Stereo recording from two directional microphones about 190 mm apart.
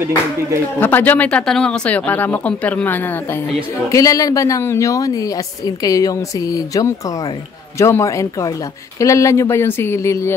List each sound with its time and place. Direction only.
0.7 s speech: 10° left (ahead or behind)